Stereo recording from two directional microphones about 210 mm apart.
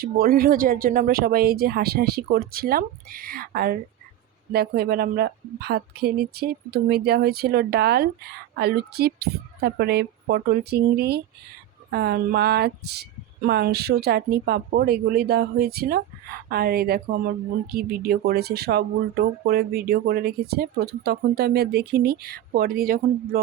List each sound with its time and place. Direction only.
0.0 s speech: 45° right (ahead or behind)